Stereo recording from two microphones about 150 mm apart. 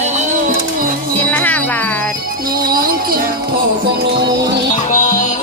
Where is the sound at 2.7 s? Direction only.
80° right.